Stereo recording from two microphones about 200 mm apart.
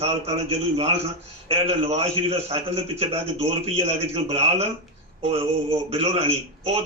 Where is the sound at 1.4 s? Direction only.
30° right (ahead or behind).